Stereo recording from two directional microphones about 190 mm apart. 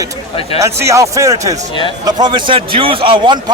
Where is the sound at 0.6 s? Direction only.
15° right (ahead or behind).